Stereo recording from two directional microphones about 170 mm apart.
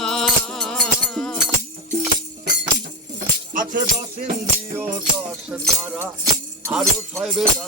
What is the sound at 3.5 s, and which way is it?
Music, 50° right (ahead or behind).